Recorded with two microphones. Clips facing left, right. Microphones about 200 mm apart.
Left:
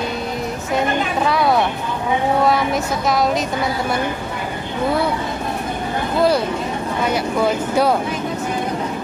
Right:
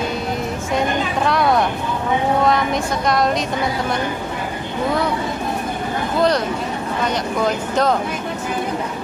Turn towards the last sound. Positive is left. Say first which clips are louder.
# left 1 dB
turn(degrees=10)  # may be behind; listen again after turning